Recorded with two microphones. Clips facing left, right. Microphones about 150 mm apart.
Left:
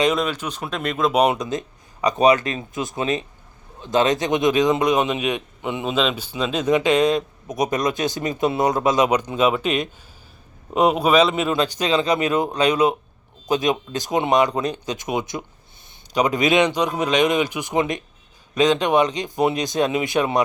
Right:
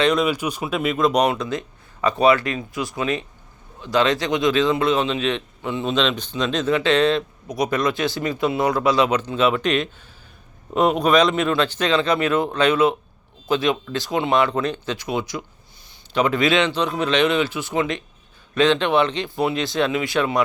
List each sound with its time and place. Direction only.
0.2 s speech: 10° right (ahead or behind)
1.3 s a man's voice: 20° left (ahead or behind)